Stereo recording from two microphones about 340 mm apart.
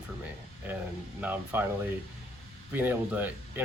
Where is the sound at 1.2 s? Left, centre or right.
Centre.